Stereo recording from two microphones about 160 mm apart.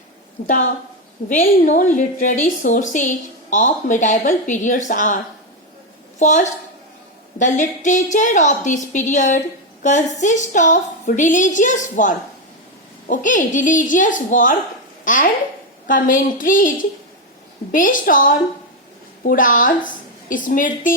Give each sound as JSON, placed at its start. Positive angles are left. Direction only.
{"t": 0.4, "sound": "a woman's voice", "side_deg": 50}